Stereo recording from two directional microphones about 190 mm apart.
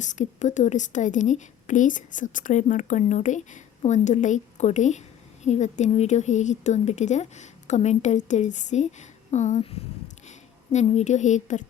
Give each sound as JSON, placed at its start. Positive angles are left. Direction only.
{"t": 0.0, "sound": "a woman's voice", "side_deg": 40}